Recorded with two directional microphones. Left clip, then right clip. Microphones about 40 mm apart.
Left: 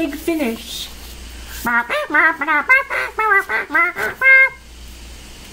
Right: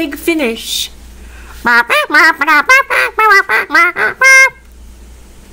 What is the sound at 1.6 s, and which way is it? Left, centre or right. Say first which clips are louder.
Quack: right 9 dB; right.